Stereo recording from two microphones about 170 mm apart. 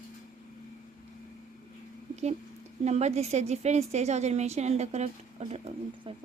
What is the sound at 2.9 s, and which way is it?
A woman's voice, 40° right (ahead or behind).